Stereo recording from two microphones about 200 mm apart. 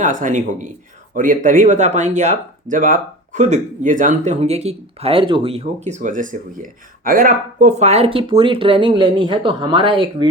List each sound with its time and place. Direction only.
0.0 s speech: 40° right (ahead or behind)